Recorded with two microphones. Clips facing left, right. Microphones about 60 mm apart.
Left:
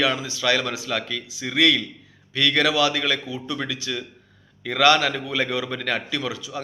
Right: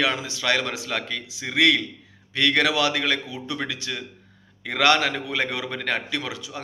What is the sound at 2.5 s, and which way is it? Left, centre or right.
Speech, right.